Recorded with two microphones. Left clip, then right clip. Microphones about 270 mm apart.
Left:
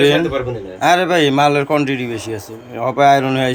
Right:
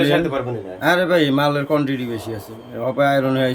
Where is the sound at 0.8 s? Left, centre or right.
Centre.